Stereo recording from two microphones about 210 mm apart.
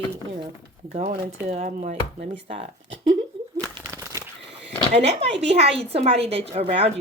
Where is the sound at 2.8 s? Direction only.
60° right (ahead or behind).